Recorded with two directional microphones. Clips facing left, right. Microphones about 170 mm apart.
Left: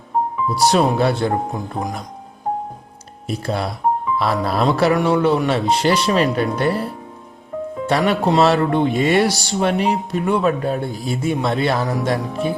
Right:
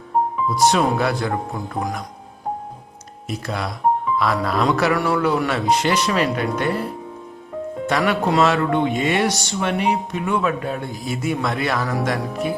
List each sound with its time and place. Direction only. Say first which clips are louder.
0.5 s speech: left 2 dB; 35° left (ahead or behind)
3.2 s speech: left 4 dB; 30° left (ahead or behind)
7.9 s speech: left 2 dB; 25° left (ahead or behind)